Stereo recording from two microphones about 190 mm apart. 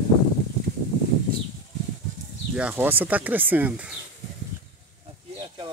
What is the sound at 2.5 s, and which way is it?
Speech, 10° right (ahead or behind).